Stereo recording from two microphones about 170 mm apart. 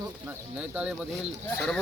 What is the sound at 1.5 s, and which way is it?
Speech, 5° left (ahead or behind).